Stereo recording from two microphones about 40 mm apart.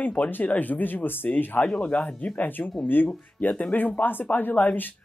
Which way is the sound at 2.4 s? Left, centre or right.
Left.